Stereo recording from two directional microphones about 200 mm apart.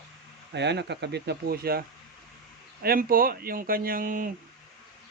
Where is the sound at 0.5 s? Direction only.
60° right (ahead or behind).